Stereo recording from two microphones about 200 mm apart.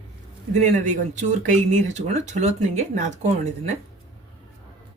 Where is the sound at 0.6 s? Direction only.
40° right (ahead or behind).